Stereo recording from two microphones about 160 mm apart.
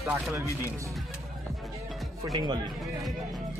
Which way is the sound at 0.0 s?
15° right (ahead or behind).